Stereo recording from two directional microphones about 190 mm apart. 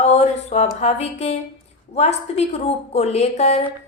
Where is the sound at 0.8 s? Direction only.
35° left (ahead or behind).